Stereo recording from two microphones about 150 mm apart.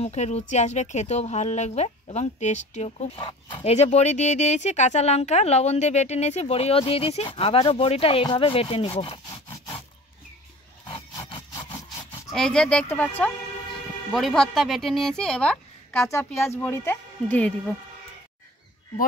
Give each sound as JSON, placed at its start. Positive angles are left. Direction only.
{"t": 0.0, "sound": "speech", "side_deg": 45}
{"t": 3.2, "sound": "speech", "side_deg": 35}
{"t": 11.1, "sound": "a sound", "side_deg": 30}
{"t": 12.3, "sound": "speech", "side_deg": 5}